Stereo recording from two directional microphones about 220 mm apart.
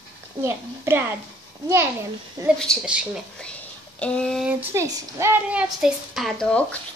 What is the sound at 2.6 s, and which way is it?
Speech, centre (ahead or behind).